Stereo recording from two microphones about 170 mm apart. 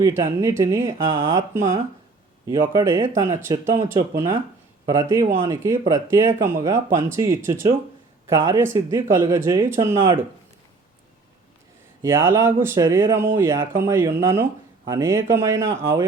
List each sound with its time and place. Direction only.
0.0 s speech: 20° right (ahead or behind)
12.0 s speech: 15° right (ahead or behind)